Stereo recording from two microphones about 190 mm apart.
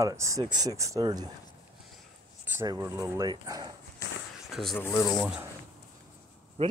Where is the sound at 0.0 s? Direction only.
15° right (ahead or behind).